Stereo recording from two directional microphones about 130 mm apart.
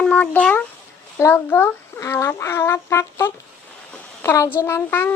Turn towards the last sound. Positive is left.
turn(degrees=15)  # may be behind; listen again after turning